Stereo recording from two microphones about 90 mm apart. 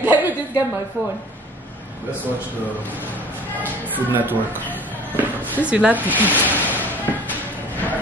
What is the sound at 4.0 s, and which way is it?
Speech, 20° right (ahead or behind).